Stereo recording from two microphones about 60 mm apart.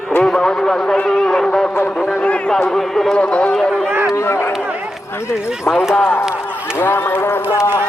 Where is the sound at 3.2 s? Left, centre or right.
Left.